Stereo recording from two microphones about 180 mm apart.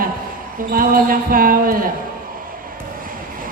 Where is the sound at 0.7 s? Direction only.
50° right (ahead or behind).